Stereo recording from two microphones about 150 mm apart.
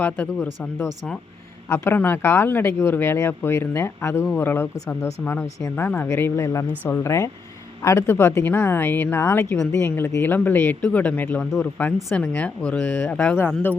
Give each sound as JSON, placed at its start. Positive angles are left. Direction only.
{"t": 0.0, "sound": "speech", "side_deg": 10}
{"t": 1.7, "sound": "speech", "side_deg": 15}